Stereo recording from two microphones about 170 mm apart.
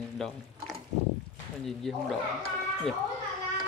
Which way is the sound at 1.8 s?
Centre (ahead or behind).